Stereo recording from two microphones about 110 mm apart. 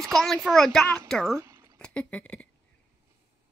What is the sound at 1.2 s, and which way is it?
Zipper, 25° right (ahead or behind).